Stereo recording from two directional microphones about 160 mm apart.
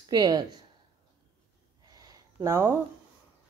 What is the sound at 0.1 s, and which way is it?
Speech, 25° right (ahead or behind).